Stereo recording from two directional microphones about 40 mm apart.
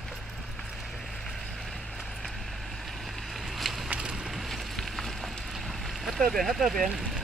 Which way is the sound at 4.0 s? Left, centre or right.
Centre.